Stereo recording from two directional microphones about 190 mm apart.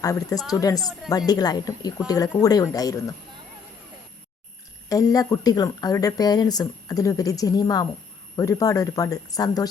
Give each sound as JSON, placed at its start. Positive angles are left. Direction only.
{"t": 0.0, "sound": "a woman's voice", "side_deg": 20}
{"t": 4.9, "sound": "speech", "side_deg": 20}